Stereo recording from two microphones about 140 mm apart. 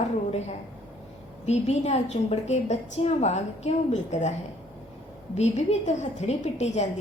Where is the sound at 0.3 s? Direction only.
50° left (ahead or behind).